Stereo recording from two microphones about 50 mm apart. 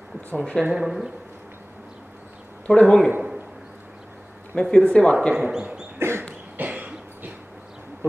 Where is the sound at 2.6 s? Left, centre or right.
Centre.